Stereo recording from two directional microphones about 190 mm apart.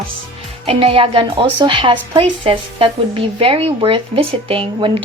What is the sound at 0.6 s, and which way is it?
A woman's voice, 30° right (ahead or behind).